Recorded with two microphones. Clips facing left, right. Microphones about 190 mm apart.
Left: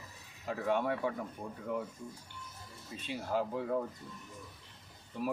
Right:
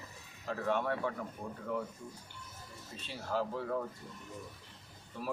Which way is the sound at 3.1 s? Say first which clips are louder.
Left 2 dB; 15° left (ahead or behind).